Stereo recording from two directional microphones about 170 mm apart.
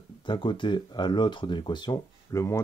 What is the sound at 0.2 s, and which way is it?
Speech, 30° left (ahead or behind).